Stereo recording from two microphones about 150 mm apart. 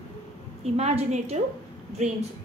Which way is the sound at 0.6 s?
45° right (ahead or behind).